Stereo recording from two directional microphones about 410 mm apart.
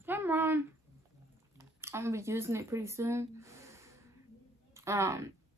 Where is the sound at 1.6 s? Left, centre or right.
Centre.